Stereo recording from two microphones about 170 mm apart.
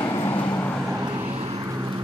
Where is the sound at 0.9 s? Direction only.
25° right (ahead or behind).